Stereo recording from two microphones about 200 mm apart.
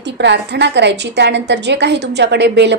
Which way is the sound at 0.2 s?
60° right (ahead or behind).